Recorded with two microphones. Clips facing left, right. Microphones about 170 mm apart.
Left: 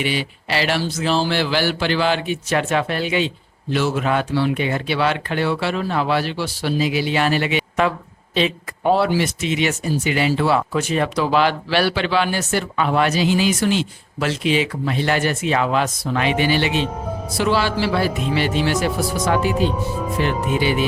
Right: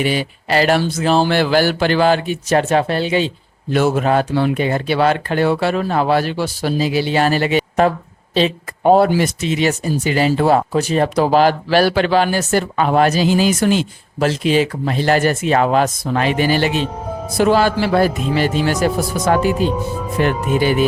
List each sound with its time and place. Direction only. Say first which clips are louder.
0.0 s speech: right 4 dB; 45° right (ahead or behind)